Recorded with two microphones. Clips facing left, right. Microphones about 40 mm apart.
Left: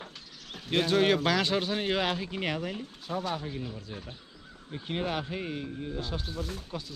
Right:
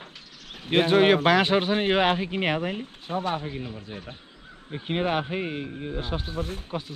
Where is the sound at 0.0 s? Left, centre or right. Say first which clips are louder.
Right 1 dB; right.